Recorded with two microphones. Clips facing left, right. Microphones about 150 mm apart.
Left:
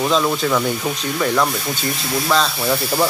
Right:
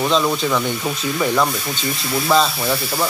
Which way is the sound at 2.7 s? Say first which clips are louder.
Left 3 dB; 10° left (ahead or behind).